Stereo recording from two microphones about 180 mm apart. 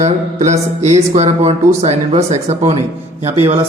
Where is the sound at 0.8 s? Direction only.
40° right (ahead or behind).